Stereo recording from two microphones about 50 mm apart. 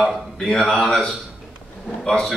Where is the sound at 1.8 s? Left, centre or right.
Centre.